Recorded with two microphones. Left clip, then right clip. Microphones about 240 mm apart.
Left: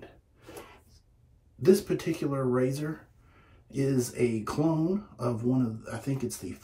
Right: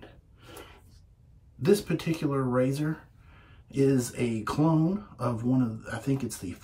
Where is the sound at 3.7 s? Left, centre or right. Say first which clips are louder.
Right 3 dB; right.